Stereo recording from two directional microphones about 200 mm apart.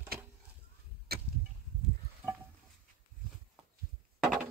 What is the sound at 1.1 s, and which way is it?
Arrow, 50° right (ahead or behind).